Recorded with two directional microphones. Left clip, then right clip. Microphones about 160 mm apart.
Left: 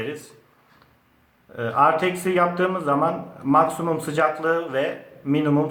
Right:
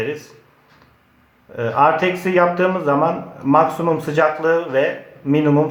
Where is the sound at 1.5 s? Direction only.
15° right (ahead or behind).